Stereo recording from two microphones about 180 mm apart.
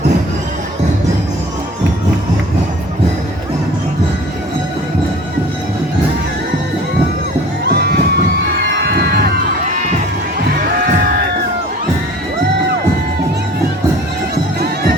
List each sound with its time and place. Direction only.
7.6 s music: 65° right (ahead or behind)
9.0 s crowd: 60° right (ahead or behind)